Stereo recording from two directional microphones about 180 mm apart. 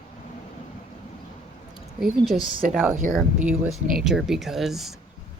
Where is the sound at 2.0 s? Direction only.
5° right (ahead or behind).